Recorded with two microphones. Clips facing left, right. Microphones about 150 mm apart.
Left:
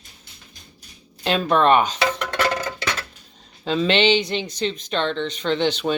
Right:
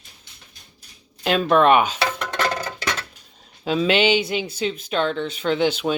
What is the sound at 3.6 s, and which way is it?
A woman's voice, 5° right (ahead or behind).